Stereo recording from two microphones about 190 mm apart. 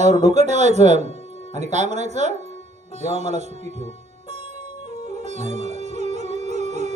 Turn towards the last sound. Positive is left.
turn(degrees=-35)  # may be behind; listen again after turning